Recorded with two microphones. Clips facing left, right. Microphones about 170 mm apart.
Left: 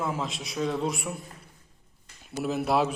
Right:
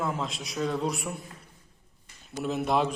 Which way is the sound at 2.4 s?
5° left (ahead or behind).